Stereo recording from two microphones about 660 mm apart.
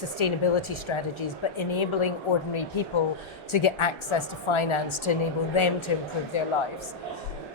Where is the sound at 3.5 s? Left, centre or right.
Left.